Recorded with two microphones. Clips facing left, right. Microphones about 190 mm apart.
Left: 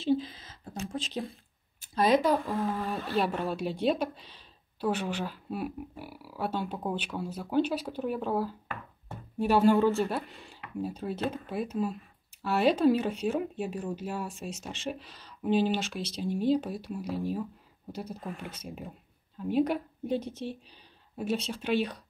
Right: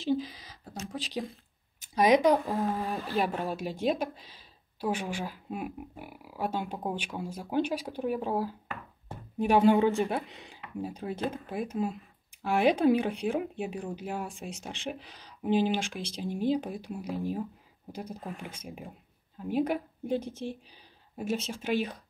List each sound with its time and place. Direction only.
0.1 s a sound: 15° right (ahead or behind)
2.0 s speech: 15° right (ahead or behind)
5.9 s speech: 50° right (ahead or behind)
6.2 s speech: 10° right (ahead or behind)